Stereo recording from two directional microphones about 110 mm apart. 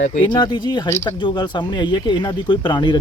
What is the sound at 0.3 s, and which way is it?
Speech, 40° left (ahead or behind).